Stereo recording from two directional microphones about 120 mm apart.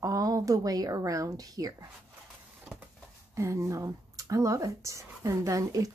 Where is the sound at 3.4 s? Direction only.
25° right (ahead or behind).